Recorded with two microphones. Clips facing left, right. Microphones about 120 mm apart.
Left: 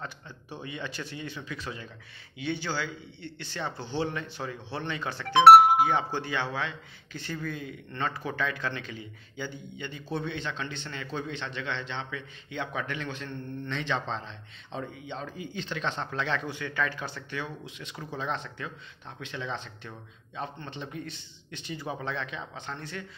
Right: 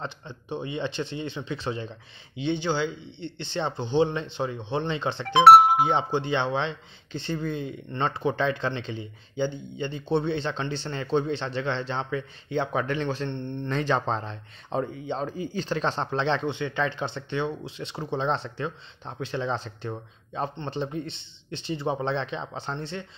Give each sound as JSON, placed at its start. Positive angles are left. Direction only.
{"t": 0.0, "sound": "speech", "side_deg": -25}
{"t": 13.7, "sound": "speech", "side_deg": -40}